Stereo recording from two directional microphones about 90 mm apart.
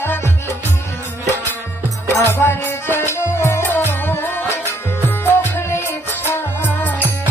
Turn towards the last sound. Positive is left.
turn(degrees=20)  # may be behind; listen again after turning